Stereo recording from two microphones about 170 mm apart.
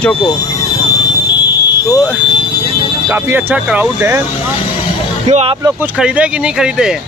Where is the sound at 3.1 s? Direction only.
15° right (ahead or behind).